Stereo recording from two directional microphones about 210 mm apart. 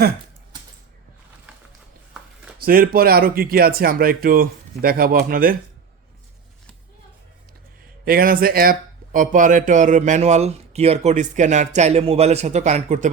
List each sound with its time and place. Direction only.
2.6 s speech: 45° right (ahead or behind)
8.0 s a man's voice: 45° right (ahead or behind)